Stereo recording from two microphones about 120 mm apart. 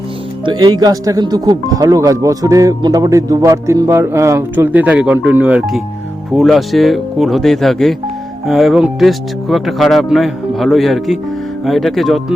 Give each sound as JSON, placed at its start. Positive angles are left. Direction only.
{"t": 0.4, "sound": "speech", "side_deg": -35}